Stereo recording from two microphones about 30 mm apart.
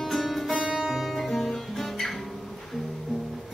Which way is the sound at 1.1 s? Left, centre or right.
Centre.